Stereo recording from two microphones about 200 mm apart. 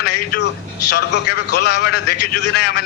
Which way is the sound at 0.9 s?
55° left (ahead or behind).